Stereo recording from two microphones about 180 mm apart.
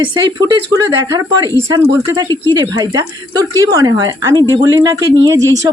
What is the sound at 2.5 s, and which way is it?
Speech, 20° right (ahead or behind).